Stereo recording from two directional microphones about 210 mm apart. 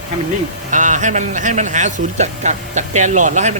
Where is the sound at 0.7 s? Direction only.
35° right (ahead or behind).